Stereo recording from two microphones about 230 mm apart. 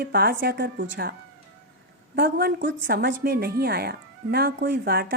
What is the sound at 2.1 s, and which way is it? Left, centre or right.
A woman's voice, right.